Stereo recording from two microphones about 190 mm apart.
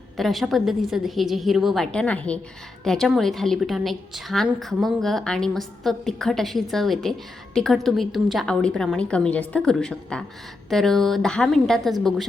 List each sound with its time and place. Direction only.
0.2 s a woman's voice: centre (ahead or behind)